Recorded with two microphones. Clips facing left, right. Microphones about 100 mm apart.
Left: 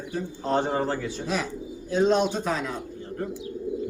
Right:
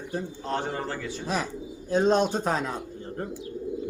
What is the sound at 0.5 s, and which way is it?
Speech, 25° left (ahead or behind).